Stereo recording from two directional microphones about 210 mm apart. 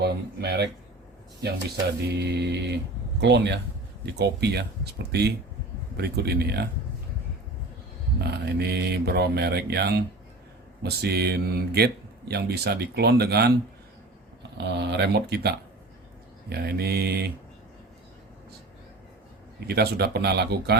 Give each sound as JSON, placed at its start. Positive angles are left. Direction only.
{"t": 0.0, "sound": "speech", "side_deg": -50}
{"t": 8.2, "sound": "speech", "side_deg": -50}
{"t": 14.6, "sound": "speech", "side_deg": -55}
{"t": 19.5, "sound": "speech", "side_deg": -50}